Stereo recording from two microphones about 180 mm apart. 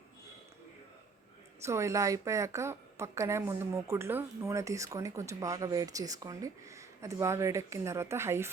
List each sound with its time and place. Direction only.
1.6 s a woman's voice: 15° right (ahead or behind)